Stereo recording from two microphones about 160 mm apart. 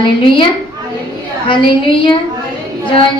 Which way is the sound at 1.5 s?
30° left (ahead or behind).